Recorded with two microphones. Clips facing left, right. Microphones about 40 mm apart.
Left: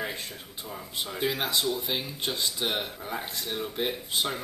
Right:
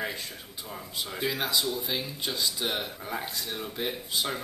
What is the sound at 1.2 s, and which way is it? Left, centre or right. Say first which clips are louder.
Speech: left 1 dB; centre.